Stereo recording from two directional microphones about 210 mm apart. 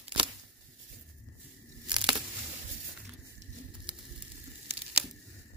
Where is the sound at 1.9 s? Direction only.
20° right (ahead or behind).